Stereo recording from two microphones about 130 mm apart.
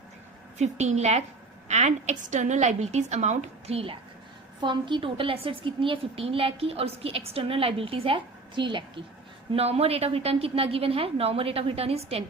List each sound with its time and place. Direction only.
0.6 s a woman's voice: 60° right (ahead or behind)
4.6 s a woman's voice: 35° right (ahead or behind)
9.5 s a woman's voice: 50° right (ahead or behind)